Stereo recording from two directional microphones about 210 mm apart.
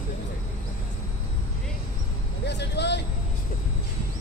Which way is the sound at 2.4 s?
55° left (ahead or behind).